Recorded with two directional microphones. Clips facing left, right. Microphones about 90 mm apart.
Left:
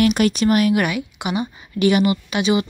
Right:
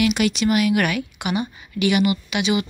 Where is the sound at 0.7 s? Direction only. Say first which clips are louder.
Left 1 dB; 20° left (ahead or behind).